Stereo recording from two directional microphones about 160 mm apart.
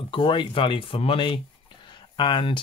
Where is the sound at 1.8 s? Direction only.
30° left (ahead or behind).